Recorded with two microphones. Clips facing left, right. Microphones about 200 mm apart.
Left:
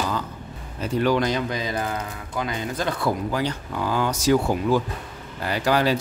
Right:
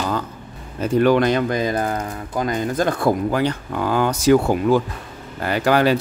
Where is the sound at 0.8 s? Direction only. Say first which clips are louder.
Right 6 dB; 55° right (ahead or behind).